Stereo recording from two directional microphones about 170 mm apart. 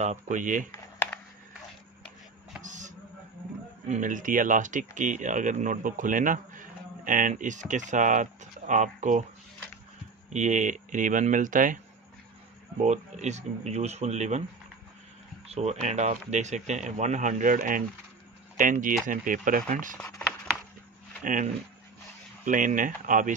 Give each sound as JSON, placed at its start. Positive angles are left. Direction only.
{"t": 0.0, "sound": "speech", "side_deg": -45}
{"t": 0.7, "sound": "computer keyboard", "side_deg": 15}
{"t": 2.6, "sound": "a sound", "side_deg": -45}
{"t": 3.9, "sound": "speech", "side_deg": -50}
{"t": 10.3, "sound": "speech", "side_deg": -45}
{"t": 12.8, "sound": "speech", "side_deg": -45}
{"t": 15.4, "sound": "speech", "side_deg": -40}
{"t": 21.2, "sound": "speech", "side_deg": -50}